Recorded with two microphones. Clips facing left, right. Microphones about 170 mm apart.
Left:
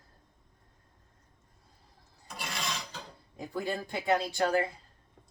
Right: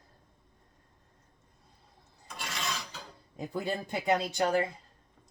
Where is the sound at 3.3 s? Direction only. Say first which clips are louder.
Right 1 dB; 20° right (ahead or behind).